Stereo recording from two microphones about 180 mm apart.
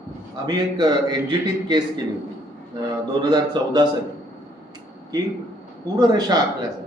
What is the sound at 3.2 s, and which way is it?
Speech, 25° right (ahead or behind).